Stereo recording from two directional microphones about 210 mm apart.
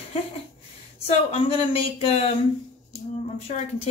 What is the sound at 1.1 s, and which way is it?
Speech, 30° left (ahead or behind).